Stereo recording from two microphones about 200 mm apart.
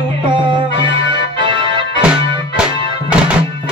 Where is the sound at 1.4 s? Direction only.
25° right (ahead or behind).